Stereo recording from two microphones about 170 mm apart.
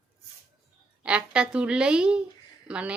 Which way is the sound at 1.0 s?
5° right (ahead or behind).